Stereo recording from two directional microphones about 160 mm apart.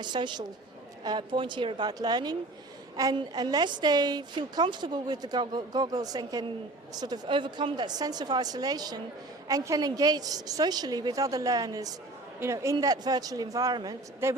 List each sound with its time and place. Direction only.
0.0 s a woman's voice: 30° right (ahead or behind)